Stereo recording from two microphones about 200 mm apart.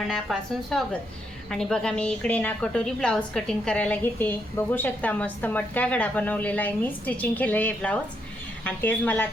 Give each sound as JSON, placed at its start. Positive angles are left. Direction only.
{"t": 0.1, "sound": "a woman's voice", "side_deg": 0}